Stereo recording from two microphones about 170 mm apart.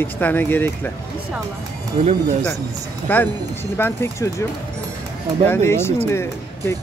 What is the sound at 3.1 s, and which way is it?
Speech, 10° left (ahead or behind).